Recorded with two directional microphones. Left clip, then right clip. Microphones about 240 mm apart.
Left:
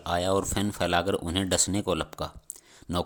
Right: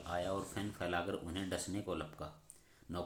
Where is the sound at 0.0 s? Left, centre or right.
Left.